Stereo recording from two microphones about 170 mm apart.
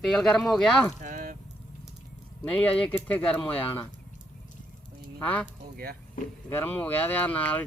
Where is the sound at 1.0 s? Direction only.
50° right (ahead or behind).